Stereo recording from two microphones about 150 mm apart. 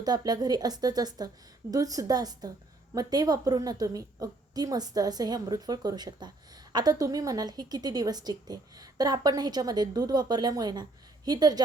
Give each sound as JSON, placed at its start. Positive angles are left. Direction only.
{"t": 0.0, "sound": "a woman's voice", "side_deg": -25}